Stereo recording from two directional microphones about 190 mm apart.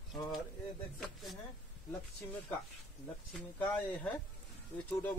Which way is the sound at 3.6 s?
10° left (ahead or behind).